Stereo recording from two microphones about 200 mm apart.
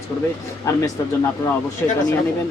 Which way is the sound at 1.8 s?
10° left (ahead or behind).